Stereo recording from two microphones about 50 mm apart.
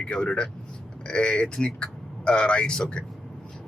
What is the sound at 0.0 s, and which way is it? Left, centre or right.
Speech, centre.